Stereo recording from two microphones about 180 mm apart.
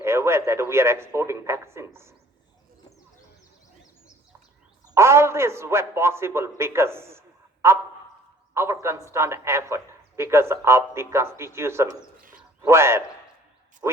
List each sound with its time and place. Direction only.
0.0 s speech: 15° right (ahead or behind)
4.9 s speech: 15° right (ahead or behind)
8.5 s speech: 15° right (ahead or behind)
12.3 s a sound: 10° right (ahead or behind)
13.8 s speech: 15° right (ahead or behind)